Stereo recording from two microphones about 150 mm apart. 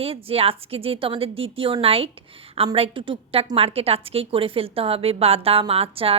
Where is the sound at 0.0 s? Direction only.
40° right (ahead or behind).